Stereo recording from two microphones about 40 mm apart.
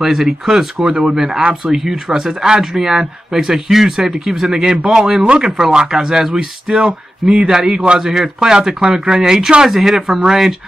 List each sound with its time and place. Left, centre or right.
0.0 s speech: centre